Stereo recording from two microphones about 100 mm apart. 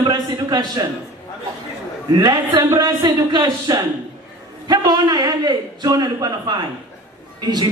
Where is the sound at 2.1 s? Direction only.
45° right (ahead or behind).